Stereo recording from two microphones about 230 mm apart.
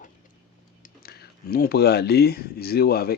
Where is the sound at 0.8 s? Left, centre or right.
Left.